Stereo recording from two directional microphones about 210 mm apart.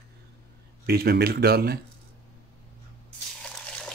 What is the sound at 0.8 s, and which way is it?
Speech, 50° right (ahead or behind).